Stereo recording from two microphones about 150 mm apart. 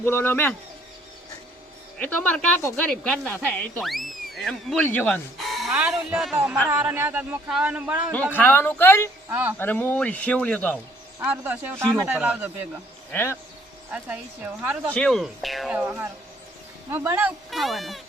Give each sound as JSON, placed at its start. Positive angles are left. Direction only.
{"t": 0.0, "sound": "speech", "side_deg": 15}
{"t": 2.0, "sound": "speech", "side_deg": 10}
{"t": 5.7, "sound": "speech", "side_deg": -10}
{"t": 8.1, "sound": "speech", "side_deg": 10}
{"t": 9.3, "sound": "speech", "side_deg": -10}
{"t": 9.6, "sound": "speech", "side_deg": 10}
{"t": 11.2, "sound": "speech", "side_deg": -10}
{"t": 13.1, "sound": "speech", "side_deg": 15}
{"t": 13.9, "sound": "speech", "side_deg": -10}
{"t": 14.9, "sound": "speech", "side_deg": 5}
{"t": 15.7, "sound": "speech", "side_deg": -10}
{"t": 17.5, "sound": "speech", "side_deg": 0}